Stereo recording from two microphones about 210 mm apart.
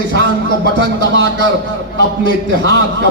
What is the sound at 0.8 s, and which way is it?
Speech, 65° right (ahead or behind).